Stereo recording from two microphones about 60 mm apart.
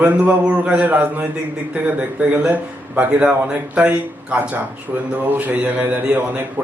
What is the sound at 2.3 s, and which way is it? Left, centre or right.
A man's voice, right.